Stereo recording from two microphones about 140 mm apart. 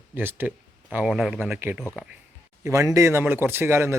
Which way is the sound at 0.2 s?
15° right (ahead or behind).